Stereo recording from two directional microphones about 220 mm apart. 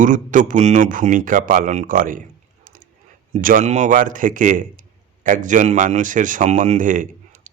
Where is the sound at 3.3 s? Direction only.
35° right (ahead or behind).